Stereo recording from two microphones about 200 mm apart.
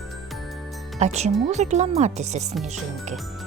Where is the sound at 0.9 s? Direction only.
35° right (ahead or behind).